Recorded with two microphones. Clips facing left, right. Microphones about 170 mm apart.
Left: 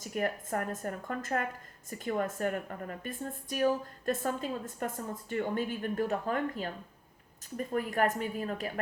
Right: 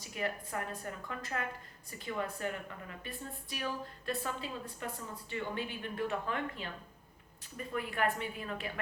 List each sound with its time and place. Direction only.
0.0 s a woman's voice: 50° left (ahead or behind)